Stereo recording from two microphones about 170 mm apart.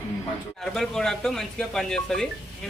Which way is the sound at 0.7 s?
5° left (ahead or behind).